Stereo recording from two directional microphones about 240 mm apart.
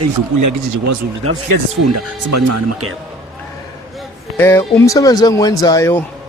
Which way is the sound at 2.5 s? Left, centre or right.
Right.